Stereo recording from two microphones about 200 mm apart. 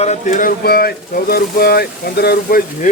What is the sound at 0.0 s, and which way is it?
A man's voice, 35° left (ahead or behind).